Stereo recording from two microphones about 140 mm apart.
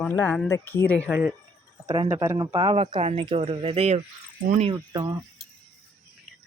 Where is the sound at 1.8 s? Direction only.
35° right (ahead or behind).